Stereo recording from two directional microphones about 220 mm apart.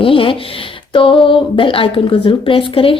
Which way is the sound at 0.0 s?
25° left (ahead or behind).